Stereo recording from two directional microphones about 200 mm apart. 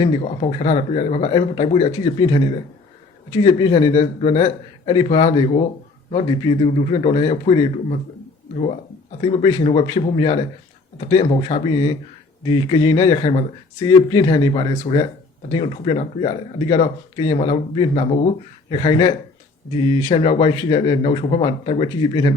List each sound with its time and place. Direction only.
0.0 s speech: 25° left (ahead or behind)
9.2 s speech: 20° left (ahead or behind)